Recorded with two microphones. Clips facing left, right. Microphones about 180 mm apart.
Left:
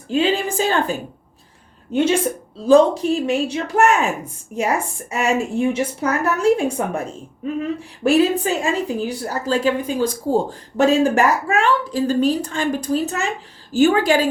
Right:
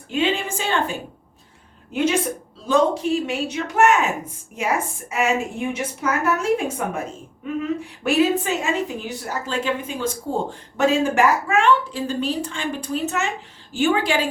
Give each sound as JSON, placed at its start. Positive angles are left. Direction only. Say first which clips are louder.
{"t": 0.1, "sound": "a woman's voice", "louder": "left 4 dB", "side_deg": 35}
{"t": 2.6, "sound": "a woman's voice", "louder": "left 6 dB", "side_deg": 35}
{"t": 8.0, "sound": "a woman's voice", "louder": "left 3 dB", "side_deg": 35}